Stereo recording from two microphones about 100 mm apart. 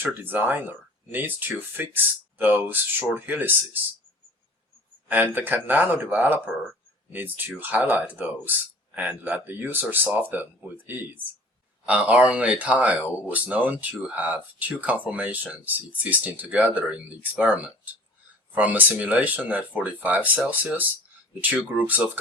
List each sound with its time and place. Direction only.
0.0 s speech: 20° right (ahead or behind)
5.0 s speech: 20° right (ahead or behind)